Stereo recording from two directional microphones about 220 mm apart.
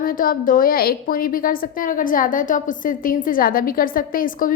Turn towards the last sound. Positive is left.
turn(degrees=40)  # may be behind; listen again after turning